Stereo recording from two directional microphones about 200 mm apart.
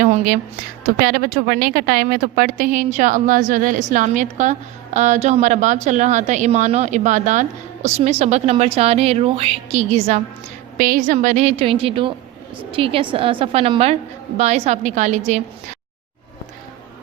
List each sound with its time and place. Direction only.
0.0 s a sound: 40° right (ahead or behind)
0.9 s a woman's voice: 45° right (ahead or behind)
10.8 s speech: 45° right (ahead or behind)